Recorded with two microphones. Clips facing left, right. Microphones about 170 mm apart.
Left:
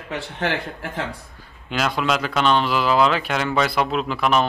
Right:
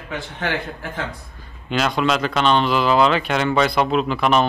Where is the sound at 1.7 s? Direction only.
5° left (ahead or behind).